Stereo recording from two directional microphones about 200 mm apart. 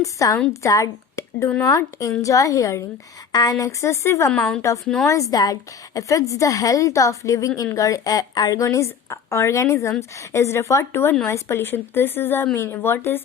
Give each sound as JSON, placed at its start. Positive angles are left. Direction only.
{"t": 0.0, "sound": "a woman's voice", "side_deg": 15}
{"t": 4.4, "sound": "a woman's voice", "side_deg": 0}
{"t": 5.0, "sound": "a woman's voice", "side_deg": 15}